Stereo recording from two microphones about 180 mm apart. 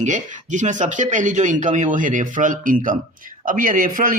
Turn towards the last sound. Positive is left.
turn(degrees=-50)  # may be behind; listen again after turning